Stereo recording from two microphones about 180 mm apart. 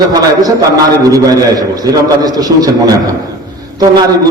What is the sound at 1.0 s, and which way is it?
A man's voice, 20° right (ahead or behind).